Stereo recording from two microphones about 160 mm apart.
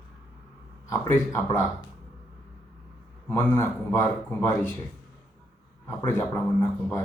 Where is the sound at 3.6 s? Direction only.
15° left (ahead or behind).